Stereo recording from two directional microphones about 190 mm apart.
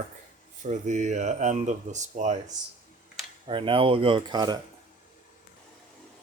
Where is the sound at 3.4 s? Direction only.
25° right (ahead or behind).